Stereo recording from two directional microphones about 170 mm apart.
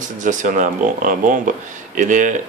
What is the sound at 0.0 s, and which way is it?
Speech, 50° right (ahead or behind).